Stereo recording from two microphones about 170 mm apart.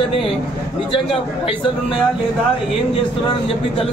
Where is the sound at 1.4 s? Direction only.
35° left (ahead or behind).